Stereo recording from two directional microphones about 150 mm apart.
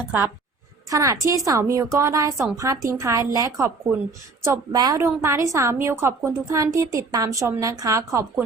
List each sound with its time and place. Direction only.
0.0 s a woman's voice: 10° right (ahead or behind)